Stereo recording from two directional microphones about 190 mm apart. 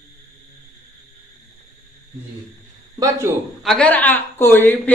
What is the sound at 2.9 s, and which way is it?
Speech, 15° right (ahead or behind).